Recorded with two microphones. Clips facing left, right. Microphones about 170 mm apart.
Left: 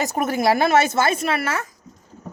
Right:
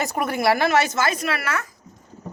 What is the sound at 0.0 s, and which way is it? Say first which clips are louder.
A woman's voice: left 2 dB; 20° left (ahead or behind).